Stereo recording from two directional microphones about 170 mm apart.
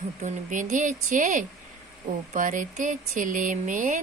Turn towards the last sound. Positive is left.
turn(degrees=-50)  # may be behind; listen again after turning